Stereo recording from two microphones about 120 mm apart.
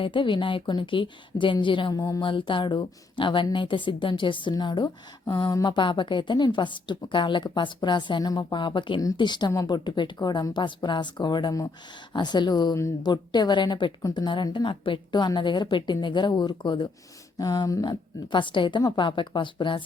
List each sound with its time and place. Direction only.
0.0 s a woman's voice: 45° left (ahead or behind)
2.0 s a sound: 30° left (ahead or behind)
2.2 s a woman's voice: 45° left (ahead or behind)
17.3 s a woman's voice: 30° left (ahead or behind)